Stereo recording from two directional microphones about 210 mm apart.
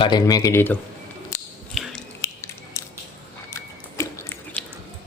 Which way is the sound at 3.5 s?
15° left (ahead or behind).